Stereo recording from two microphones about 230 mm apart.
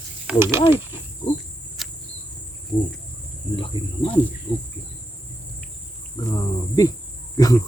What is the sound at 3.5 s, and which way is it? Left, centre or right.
Speech, left.